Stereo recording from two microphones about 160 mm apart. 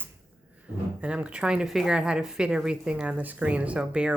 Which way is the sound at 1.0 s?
5° right (ahead or behind).